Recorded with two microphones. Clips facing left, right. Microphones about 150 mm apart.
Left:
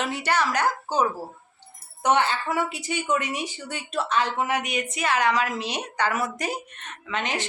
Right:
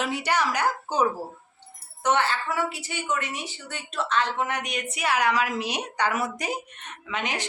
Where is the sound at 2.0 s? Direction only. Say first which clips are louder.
Left 2 dB; 15° left (ahead or behind).